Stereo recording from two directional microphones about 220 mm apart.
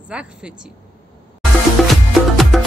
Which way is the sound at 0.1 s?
5° right (ahead or behind).